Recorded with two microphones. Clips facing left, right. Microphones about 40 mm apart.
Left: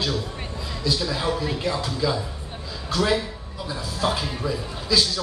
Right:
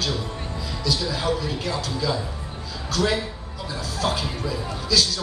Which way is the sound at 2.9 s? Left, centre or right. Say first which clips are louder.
Even; centre.